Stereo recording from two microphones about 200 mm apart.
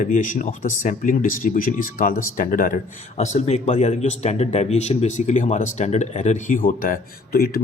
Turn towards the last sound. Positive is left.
turn(degrees=45)  # may be behind; listen again after turning